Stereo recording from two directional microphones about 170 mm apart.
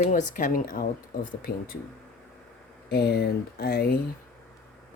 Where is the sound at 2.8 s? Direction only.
65° left (ahead or behind).